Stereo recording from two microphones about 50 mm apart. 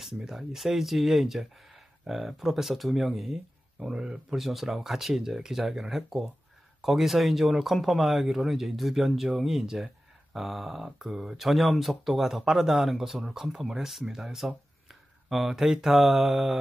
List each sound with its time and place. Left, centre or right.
0.0 s speech: centre